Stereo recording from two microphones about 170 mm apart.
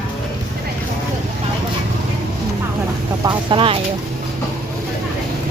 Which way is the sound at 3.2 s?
25° right (ahead or behind).